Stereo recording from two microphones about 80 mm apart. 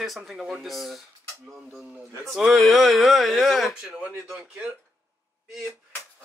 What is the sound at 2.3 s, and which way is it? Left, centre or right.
Speech, centre.